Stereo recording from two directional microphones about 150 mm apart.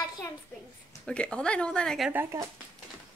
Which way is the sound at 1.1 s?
5° left (ahead or behind).